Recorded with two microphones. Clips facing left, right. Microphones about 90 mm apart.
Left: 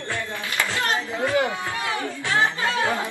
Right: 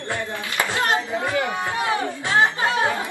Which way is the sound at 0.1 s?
20° right (ahead or behind).